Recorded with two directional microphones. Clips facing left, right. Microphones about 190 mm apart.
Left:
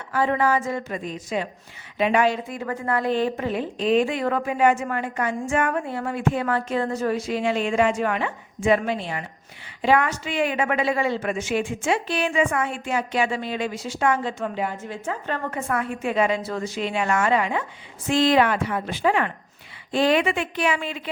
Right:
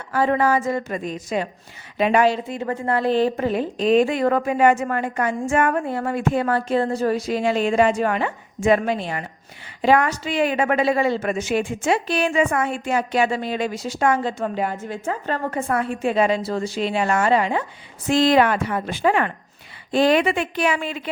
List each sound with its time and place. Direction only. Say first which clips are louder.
0.1 s a woman's voice: right 2 dB; 40° right (ahead or behind)